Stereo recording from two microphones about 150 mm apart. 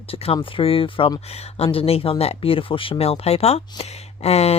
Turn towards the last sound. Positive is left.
turn(degrees=45)  # may be behind; listen again after turning